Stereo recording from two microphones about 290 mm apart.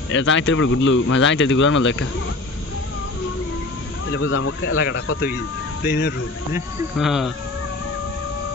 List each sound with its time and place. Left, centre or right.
0.1 s speech: left
4.1 s speech: left
5.9 s speech: left
6.5 s speech: centre